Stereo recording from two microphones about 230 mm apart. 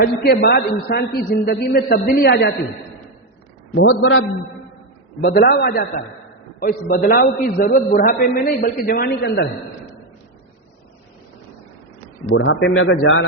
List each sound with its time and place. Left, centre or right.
0.0 s a man's voice: left
3.8 s a man's voice: left
5.2 s a man's voice: left
12.3 s speech: left